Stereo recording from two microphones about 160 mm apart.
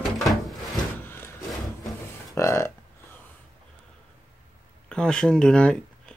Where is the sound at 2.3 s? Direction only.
15° left (ahead or behind).